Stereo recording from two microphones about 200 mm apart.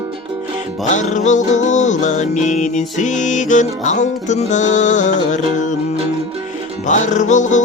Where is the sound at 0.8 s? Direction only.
35° left (ahead or behind).